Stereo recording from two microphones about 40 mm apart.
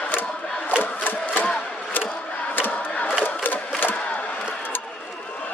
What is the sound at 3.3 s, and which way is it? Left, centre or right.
Crowd, left.